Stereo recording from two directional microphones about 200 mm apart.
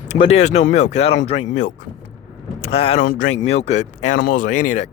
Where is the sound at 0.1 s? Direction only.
30° left (ahead or behind).